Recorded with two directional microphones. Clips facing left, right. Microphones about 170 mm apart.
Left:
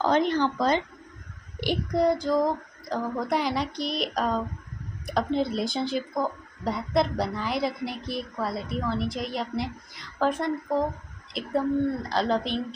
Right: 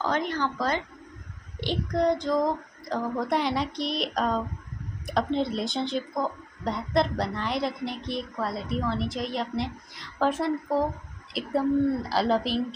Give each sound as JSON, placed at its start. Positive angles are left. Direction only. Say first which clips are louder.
{"t": 0.0, "sound": "speech", "louder": "left 5 dB", "side_deg": 25}
{"t": 1.6, "sound": "speech", "louder": "left 2 dB", "side_deg": 10}